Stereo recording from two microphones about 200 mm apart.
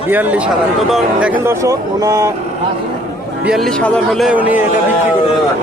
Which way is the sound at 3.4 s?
Centre (ahead or behind).